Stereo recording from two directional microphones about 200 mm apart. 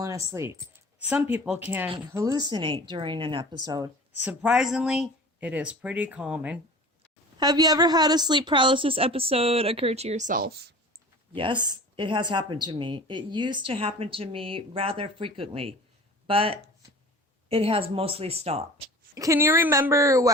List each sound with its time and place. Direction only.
0.0 s a woman's voice: 15° right (ahead or behind)
4.2 s speech: 5° right (ahead or behind)
7.3 s a woman's voice: 20° right (ahead or behind); by 10.8 s 55° right (ahead or behind)
11.3 s a woman's voice: 25° right (ahead or behind)
19.1 s a woman's voice: 15° right (ahead or behind)